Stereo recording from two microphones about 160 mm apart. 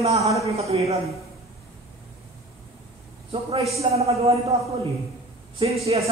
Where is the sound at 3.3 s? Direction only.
35° right (ahead or behind).